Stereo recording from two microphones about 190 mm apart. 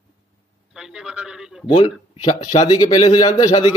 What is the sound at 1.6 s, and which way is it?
Speech, 25° left (ahead or behind).